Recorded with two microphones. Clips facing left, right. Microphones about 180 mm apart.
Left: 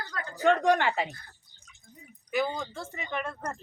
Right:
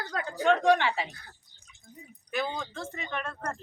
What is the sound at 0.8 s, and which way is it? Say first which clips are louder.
Speech: left 2 dB; 45° left (ahead or behind).